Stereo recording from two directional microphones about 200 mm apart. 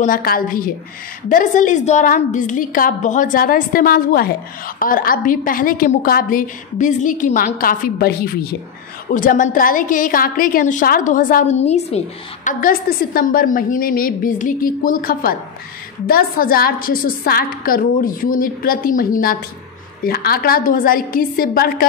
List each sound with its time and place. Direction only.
0.0 s a woman's voice: 45° left (ahead or behind)
12.4 s a woman's voice: 45° left (ahead or behind)